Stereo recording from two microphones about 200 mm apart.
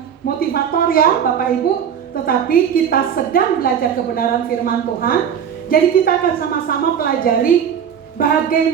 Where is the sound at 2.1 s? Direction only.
45° left (ahead or behind).